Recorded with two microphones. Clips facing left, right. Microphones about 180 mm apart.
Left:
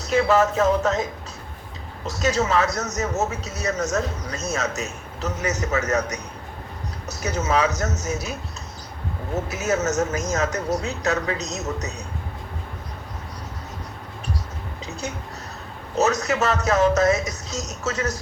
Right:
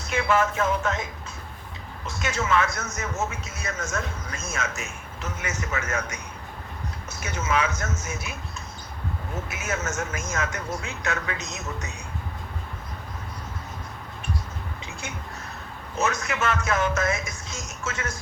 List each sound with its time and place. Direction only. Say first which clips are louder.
0.0 s a man's voice: left 5 dB; 40° left (ahead or behind)
16.0 s a man's voice: left 6 dB; 40° left (ahead or behind)